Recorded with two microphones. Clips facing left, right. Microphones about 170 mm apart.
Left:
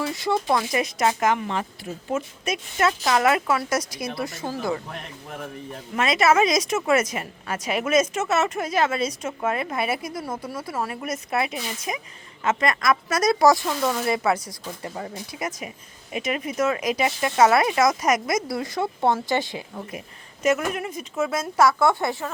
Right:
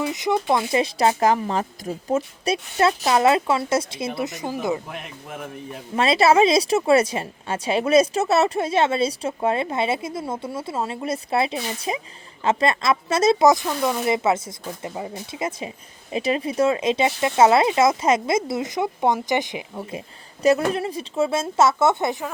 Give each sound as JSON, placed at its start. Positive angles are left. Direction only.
{"t": 0.0, "sound": "a woman's voice", "side_deg": -20}
{"t": 4.9, "sound": "speech", "side_deg": -5}
{"t": 6.0, "sound": "a woman's voice", "side_deg": -30}
{"t": 20.4, "sound": "a woman's voice", "side_deg": -35}